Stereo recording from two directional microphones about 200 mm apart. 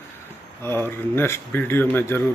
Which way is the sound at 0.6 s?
10° left (ahead or behind).